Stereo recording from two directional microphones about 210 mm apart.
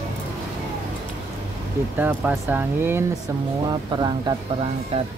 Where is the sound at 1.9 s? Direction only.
10° right (ahead or behind).